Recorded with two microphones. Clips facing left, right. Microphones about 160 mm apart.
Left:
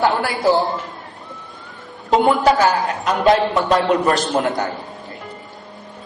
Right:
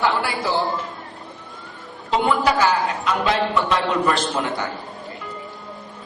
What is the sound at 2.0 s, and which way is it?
A woman's voice, 45° left (ahead or behind).